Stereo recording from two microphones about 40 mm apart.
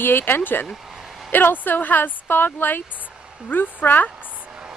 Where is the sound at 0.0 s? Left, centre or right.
Left.